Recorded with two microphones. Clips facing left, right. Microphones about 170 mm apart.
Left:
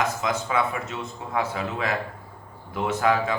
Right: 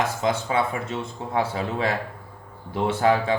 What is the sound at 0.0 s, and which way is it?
A man's voice, 30° right (ahead or behind).